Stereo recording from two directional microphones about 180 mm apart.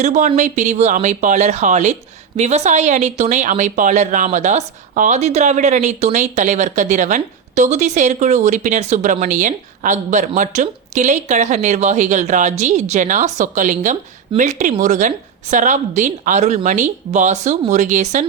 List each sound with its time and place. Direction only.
0.0 s a woman's voice: 40° right (ahead or behind)